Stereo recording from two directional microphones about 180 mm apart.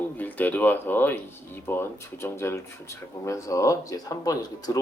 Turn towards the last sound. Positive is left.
turn(degrees=20)  # may be behind; listen again after turning